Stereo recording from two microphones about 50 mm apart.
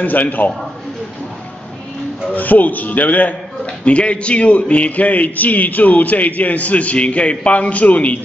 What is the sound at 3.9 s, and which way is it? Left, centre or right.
A man's voice, left.